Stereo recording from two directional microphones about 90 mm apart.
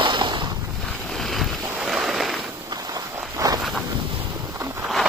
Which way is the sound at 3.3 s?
40° right (ahead or behind).